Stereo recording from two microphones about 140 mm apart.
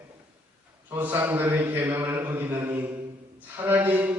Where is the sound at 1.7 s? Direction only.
15° right (ahead or behind).